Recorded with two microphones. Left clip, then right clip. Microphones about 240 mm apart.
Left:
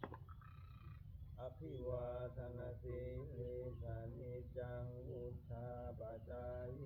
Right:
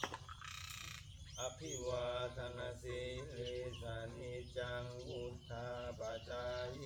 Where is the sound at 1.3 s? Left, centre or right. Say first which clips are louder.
Right 6 dB; centre.